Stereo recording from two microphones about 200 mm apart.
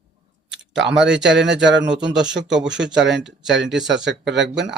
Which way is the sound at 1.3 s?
60° right (ahead or behind).